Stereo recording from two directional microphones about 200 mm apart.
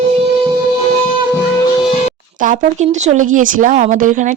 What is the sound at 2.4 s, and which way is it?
A woman's voice, 40° right (ahead or behind).